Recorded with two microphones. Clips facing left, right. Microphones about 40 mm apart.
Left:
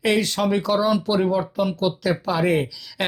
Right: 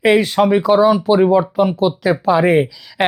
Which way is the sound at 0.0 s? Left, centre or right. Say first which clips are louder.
Right 8 dB; right.